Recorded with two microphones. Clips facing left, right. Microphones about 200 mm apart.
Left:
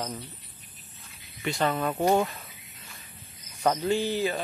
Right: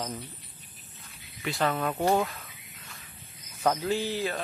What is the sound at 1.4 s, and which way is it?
Speech, centre (ahead or behind).